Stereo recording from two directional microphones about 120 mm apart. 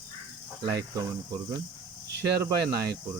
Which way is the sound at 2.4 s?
30° right (ahead or behind).